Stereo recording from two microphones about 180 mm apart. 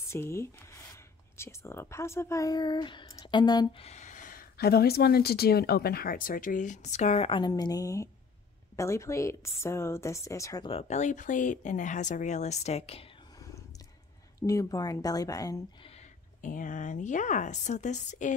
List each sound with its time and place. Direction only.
0.1 s speech: 15° left (ahead or behind)
3.8 s a woman's voice: 40° left (ahead or behind); by 10.7 s 20° left (ahead or behind)
10.7 s speech: 35° left (ahead or behind)
14.4 s a woman's voice: 15° left (ahead or behind)
15.9 s speech: 40° left (ahead or behind)